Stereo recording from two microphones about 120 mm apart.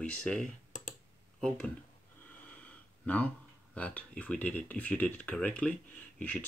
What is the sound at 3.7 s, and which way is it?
Speech, 10° left (ahead or behind).